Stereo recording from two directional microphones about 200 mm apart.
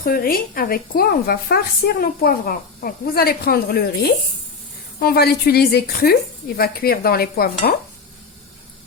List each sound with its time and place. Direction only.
0.0 s a woman's voice: 45° left (ahead or behind)